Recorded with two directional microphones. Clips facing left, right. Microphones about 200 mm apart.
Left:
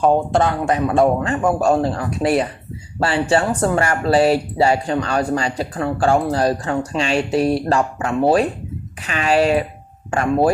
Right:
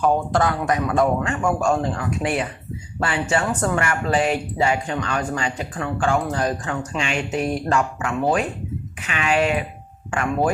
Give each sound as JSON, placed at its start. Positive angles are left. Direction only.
{"t": 0.0, "sound": "speech", "side_deg": 25}